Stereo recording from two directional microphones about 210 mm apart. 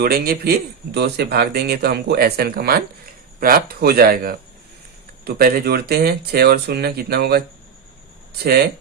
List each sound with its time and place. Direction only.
0.0 s a man's voice: 45° right (ahead or behind)